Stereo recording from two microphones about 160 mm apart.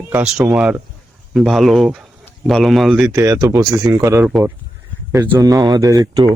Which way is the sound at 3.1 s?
20° right (ahead or behind).